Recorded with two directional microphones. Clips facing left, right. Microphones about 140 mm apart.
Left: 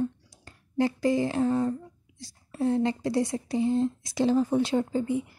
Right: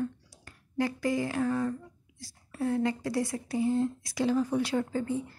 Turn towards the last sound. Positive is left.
turn(degrees=15)  # may be behind; listen again after turning